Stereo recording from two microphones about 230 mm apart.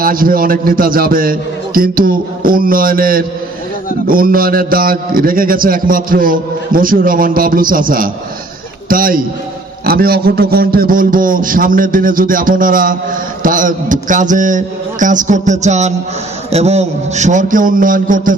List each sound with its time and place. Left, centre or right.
0.0 s a man's voice: right